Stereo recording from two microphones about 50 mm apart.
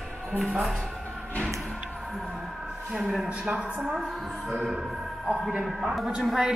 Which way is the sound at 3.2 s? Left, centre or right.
Centre.